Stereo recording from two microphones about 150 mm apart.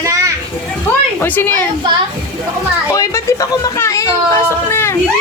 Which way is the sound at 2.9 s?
20° left (ahead or behind).